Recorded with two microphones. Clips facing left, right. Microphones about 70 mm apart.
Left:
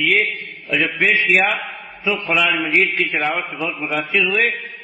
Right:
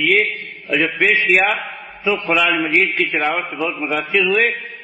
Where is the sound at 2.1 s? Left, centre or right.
Centre.